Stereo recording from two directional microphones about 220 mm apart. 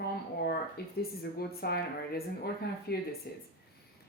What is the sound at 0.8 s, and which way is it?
Speech, 45° left (ahead or behind).